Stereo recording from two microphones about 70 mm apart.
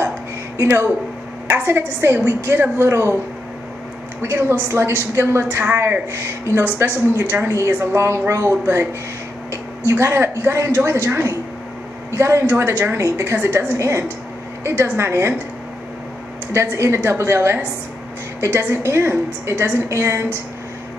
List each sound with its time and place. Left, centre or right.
0.6 s a woman's voice: right
4.2 s a woman's voice: right
16.7 s a woman's voice: right